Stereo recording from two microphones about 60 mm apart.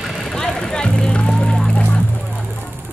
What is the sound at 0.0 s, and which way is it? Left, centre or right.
Music, centre.